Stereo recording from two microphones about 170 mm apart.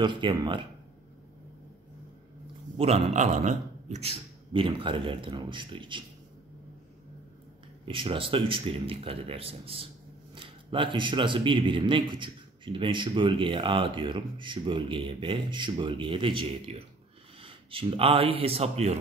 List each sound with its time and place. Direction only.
0.0 s speech: 25° right (ahead or behind)
2.8 s a man's voice: 40° right (ahead or behind)
7.8 s a man's voice: 30° right (ahead or behind)